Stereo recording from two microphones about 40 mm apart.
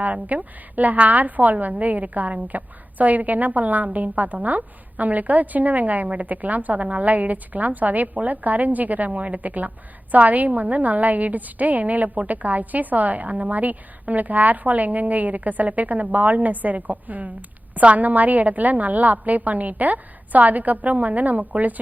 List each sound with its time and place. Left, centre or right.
0.0 s a woman's voice: right